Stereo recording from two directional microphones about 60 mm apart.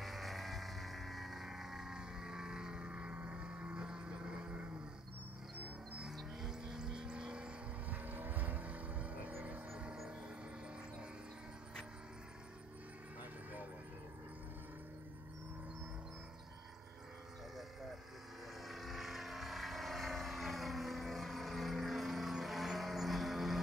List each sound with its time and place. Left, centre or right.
0.0 s vehicle: centre
5.9 s vehicle: centre
7.9 s vehicle: right
13.2 s a sound: right
18.7 s vehicle: centre